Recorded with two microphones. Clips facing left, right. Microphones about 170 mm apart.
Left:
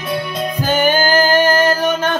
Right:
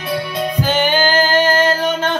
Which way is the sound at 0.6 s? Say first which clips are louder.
Left 2 dB; 45° left (ahead or behind).